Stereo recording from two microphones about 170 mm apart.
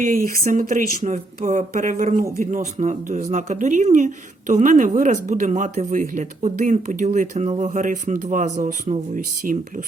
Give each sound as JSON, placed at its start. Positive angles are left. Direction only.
{"t": 0.0, "sound": "speech", "side_deg": -55}